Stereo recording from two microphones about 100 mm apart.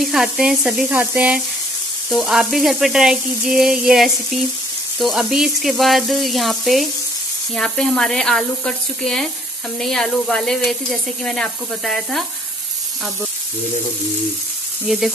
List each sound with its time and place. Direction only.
0.0 s sizzle: centre (ahead or behind)
2.0 s speech: 5° right (ahead or behind)
14.9 s speech: 5° right (ahead or behind)